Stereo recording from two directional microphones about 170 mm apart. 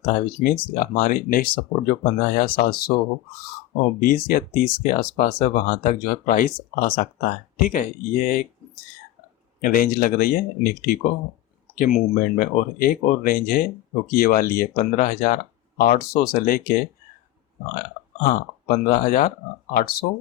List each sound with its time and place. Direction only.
0.0 s speech: 55° left (ahead or behind)
4.0 s speech: 55° left (ahead or behind)
9.6 s speech: 55° left (ahead or behind)